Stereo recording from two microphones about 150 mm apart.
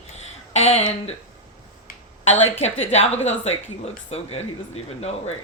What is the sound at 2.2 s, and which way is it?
A woman's voice, 45° left (ahead or behind).